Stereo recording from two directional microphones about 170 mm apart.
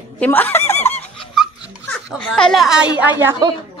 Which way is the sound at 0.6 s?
40° left (ahead or behind).